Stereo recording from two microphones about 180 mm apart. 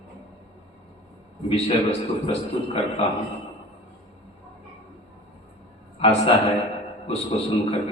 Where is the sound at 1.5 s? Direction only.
35° left (ahead or behind).